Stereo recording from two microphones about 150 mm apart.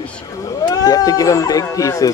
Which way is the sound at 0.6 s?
25° left (ahead or behind).